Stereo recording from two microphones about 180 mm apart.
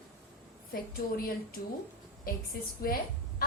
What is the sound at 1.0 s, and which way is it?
Speech, 50° left (ahead or behind).